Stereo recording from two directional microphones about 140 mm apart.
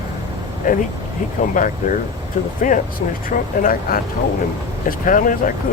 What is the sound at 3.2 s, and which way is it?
Speech, 80° left.